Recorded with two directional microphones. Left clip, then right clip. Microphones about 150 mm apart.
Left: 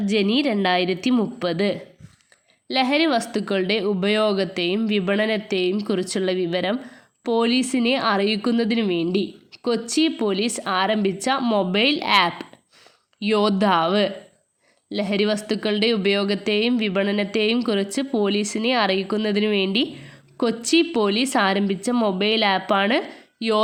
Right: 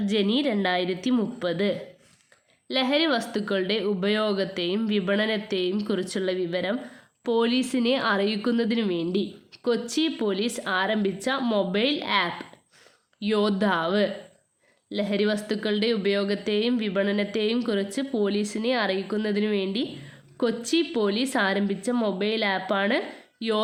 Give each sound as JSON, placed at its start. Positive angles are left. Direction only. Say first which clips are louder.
{"t": 0.0, "sound": "a woman's voice", "louder": "left 4 dB", "side_deg": 30}